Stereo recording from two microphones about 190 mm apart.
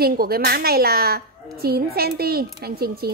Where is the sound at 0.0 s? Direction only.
55° right (ahead or behind).